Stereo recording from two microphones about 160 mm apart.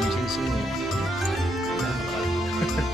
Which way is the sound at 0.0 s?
Centre (ahead or behind).